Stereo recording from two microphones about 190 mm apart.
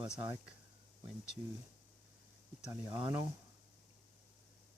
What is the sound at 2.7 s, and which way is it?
Speech, 15° right (ahead or behind).